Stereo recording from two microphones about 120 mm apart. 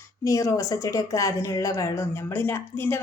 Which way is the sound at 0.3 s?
25° left (ahead or behind).